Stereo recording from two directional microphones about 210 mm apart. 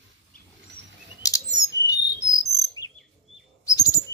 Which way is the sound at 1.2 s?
15° left (ahead or behind).